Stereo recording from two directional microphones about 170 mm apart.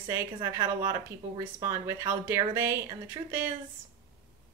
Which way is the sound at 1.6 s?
15° right (ahead or behind).